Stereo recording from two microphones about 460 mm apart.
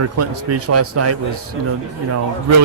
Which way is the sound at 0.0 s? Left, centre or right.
Right.